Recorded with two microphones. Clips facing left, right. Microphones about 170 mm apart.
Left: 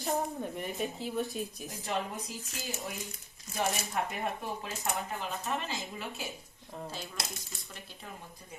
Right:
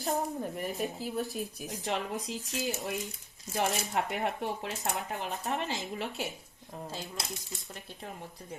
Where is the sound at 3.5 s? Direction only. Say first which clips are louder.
Right 2 dB; 75° right (ahead or behind).